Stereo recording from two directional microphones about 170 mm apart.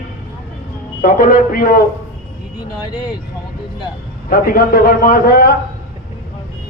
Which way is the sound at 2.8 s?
25° left (ahead or behind).